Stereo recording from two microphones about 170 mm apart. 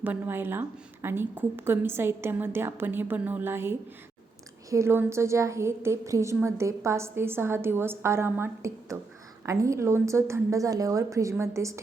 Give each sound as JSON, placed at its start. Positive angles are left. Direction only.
{"t": 0.0, "sound": "a woman's voice", "side_deg": -10}